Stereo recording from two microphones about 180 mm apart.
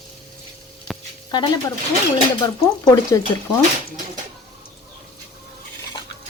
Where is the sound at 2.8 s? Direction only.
20° left (ahead or behind).